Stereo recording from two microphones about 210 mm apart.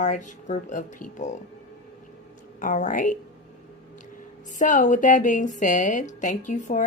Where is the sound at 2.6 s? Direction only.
40° left (ahead or behind).